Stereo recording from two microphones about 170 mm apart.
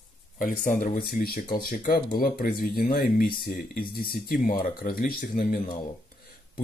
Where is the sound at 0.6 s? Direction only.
50° left (ahead or behind).